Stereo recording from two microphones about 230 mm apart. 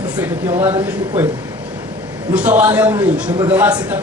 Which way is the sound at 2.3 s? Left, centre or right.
Centre.